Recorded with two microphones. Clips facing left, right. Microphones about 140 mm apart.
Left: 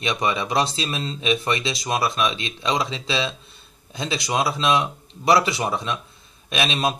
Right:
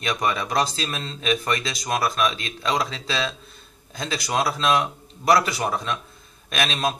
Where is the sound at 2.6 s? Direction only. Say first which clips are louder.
Even; 15° left (ahead or behind).